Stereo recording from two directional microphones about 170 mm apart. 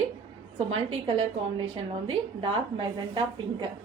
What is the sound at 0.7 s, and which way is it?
A woman's voice, 35° right (ahead or behind).